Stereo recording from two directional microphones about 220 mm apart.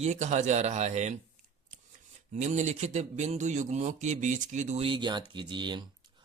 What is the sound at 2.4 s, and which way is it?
A man's voice, 30° right (ahead or behind).